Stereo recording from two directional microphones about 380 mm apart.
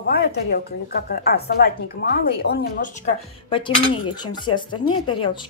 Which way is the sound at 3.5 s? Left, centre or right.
Centre.